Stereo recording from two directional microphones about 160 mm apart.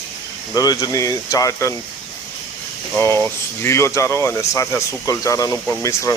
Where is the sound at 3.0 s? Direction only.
15° left (ahead or behind).